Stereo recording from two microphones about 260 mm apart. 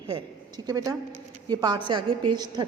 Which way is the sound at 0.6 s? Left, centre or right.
Centre.